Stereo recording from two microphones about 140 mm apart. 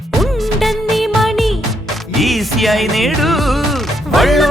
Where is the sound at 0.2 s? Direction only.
Centre (ahead or behind).